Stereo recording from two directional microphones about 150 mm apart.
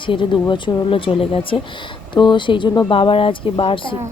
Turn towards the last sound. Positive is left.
turn(degrees=35)  # may be behind; listen again after turning